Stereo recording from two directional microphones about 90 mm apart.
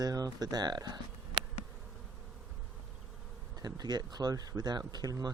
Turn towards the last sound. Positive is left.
turn(degrees=-45)  # may be behind; listen again after turning